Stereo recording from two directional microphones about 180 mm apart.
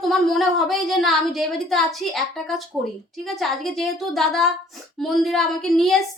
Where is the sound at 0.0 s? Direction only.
Centre (ahead or behind).